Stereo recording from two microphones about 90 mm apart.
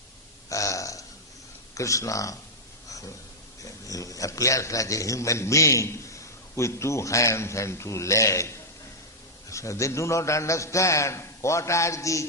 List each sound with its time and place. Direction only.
0.5 s burping: 35° left (ahead or behind)
1.7 s a man's voice: 35° left (ahead or behind)
3.6 s a man's voice: 40° left (ahead or behind)